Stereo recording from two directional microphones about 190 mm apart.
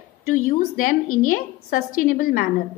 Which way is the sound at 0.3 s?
40° left (ahead or behind).